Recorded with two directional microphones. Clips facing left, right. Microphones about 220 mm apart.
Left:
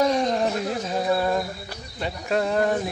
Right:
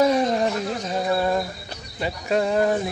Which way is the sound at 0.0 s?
5° right (ahead or behind).